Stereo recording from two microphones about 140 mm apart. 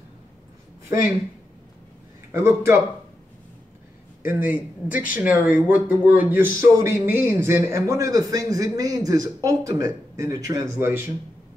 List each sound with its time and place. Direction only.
2.3 s a man's voice: 20° right (ahead or behind)
4.2 s a man's voice: 15° right (ahead or behind)